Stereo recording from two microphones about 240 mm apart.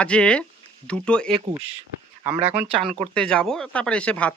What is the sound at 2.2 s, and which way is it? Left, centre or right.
Speech, centre.